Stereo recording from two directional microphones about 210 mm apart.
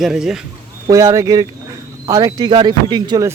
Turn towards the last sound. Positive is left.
turn(degrees=-20)  # may be behind; listen again after turning